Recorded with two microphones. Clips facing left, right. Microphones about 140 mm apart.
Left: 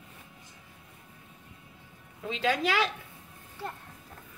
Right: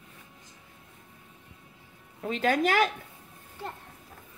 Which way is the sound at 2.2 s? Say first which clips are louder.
Right 3 dB; 50° right (ahead or behind).